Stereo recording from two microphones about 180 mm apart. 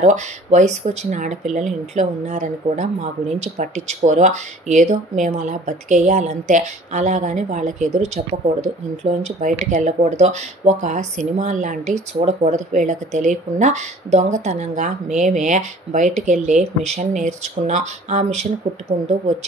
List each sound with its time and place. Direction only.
0.0 s speech: 40° right (ahead or behind)